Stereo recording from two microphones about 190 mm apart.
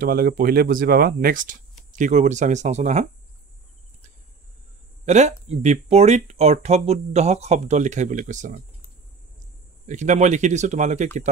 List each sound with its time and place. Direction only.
0.0 s speech: 50° right (ahead or behind)
5.0 s speech: 35° right (ahead or behind)
9.8 s speech: 40° right (ahead or behind)